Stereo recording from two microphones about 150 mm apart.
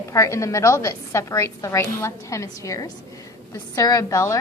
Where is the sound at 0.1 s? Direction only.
20° left (ahead or behind).